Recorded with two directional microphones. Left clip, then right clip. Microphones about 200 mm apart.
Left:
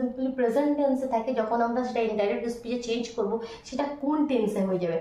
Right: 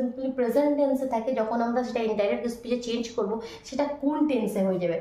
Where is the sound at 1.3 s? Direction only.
40° right (ahead or behind).